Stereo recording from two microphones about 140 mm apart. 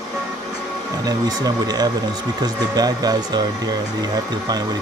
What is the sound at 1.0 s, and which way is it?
Speech, 30° right (ahead or behind).